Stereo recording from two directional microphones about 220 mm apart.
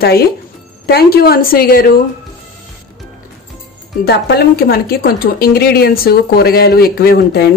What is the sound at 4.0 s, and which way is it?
A woman's voice, 45° left (ahead or behind).